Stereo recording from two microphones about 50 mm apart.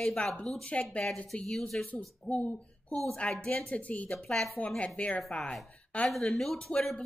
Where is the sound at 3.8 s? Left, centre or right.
Left.